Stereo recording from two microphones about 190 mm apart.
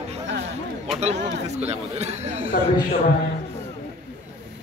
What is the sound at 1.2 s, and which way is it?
Speech, 65° right (ahead or behind).